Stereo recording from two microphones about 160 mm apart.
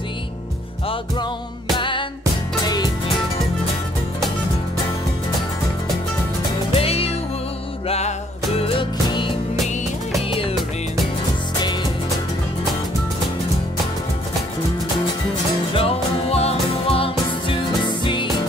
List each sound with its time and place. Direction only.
1.8 s music: 30° left (ahead or behind)
6.7 s music: 40° left (ahead or behind)
8.5 s music: 35° left (ahead or behind)
15.7 s music: 35° left (ahead or behind)